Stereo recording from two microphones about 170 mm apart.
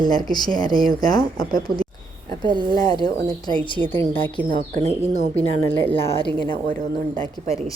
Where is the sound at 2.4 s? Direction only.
25° right (ahead or behind).